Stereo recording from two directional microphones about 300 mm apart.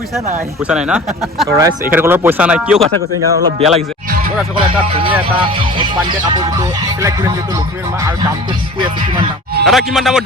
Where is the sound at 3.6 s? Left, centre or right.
Right.